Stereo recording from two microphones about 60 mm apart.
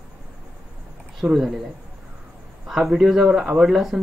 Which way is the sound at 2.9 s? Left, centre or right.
Centre.